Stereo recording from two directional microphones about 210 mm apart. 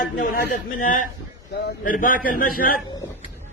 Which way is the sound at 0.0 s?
45° left (ahead or behind).